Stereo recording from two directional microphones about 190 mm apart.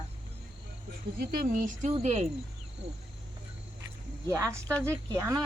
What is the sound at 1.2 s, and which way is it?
Speech, 50° right (ahead or behind).